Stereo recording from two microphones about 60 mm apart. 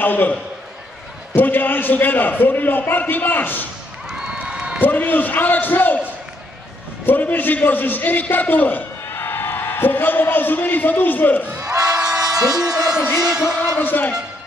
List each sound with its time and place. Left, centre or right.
0.0 s a man's voice: left
4.1 s crowd: centre
4.8 s a man's voice: left
7.1 s a man's voice: left
11.6 s crowd: right
12.3 s a sound: centre
13.7 s a man's voice: left